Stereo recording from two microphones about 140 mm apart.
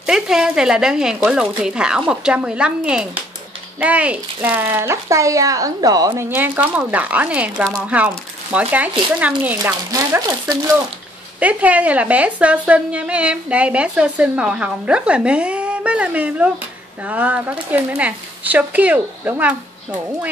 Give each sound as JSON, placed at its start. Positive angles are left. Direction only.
{"t": 0.0, "sound": "speech", "side_deg": -5}
{"t": 6.3, "sound": "a woman's voice", "side_deg": -15}
{"t": 9.6, "sound": "speech", "side_deg": -25}
{"t": 11.3, "sound": "a woman's voice", "side_deg": -10}